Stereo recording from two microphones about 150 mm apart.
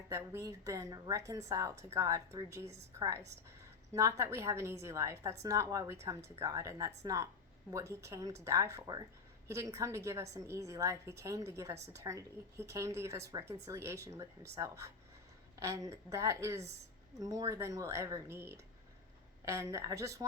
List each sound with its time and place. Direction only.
0.1 s a woman's voice: 20° right (ahead or behind)